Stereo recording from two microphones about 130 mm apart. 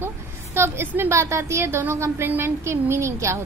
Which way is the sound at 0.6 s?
20° right (ahead or behind).